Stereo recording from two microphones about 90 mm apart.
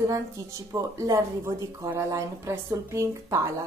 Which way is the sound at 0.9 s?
35° right (ahead or behind).